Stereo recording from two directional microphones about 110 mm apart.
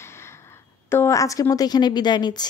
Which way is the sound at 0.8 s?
25° left (ahead or behind).